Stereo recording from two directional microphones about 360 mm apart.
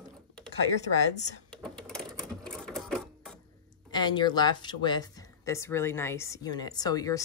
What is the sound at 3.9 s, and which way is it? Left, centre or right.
Speech, centre.